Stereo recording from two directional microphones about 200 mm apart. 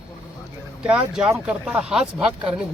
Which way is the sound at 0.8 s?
5° right (ahead or behind).